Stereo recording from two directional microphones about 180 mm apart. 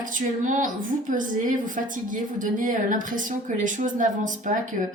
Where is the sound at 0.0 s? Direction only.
45° right (ahead or behind).